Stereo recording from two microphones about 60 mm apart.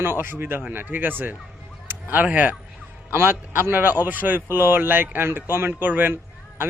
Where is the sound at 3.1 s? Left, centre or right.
Right.